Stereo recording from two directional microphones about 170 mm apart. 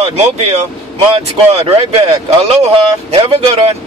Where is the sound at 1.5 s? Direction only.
35° right (ahead or behind).